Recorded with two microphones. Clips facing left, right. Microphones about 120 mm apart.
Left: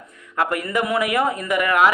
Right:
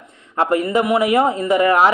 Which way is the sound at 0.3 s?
25° right (ahead or behind).